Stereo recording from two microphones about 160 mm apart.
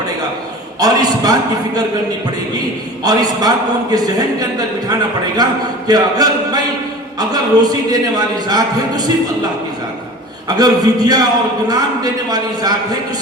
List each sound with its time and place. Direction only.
0.8 s a man's voice: 25° right (ahead or behind)
3.0 s a man's voice: 25° right (ahead or behind)
5.9 s mantra: 25° right (ahead or behind)
7.2 s a man's voice: 25° right (ahead or behind)
10.6 s a man's voice: 25° right (ahead or behind)